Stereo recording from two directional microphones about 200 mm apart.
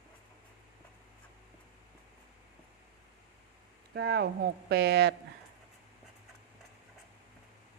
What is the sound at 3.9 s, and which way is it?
Speech, 55° right (ahead or behind).